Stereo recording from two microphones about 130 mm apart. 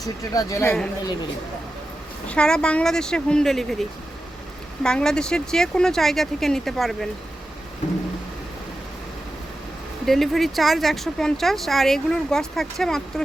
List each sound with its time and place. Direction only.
0.3 s speech: 20° left (ahead or behind)
2.2 s speech: 10° left (ahead or behind)
10.1 s speech: centre (ahead or behind)